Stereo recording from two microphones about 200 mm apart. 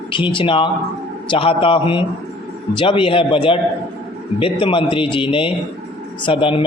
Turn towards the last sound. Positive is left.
turn(degrees=25)  # may be behind; listen again after turning